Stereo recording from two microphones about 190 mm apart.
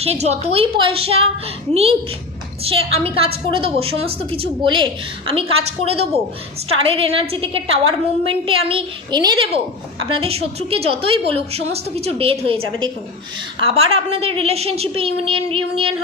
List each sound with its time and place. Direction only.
0.0 s a woman's voice: 35° right (ahead or behind)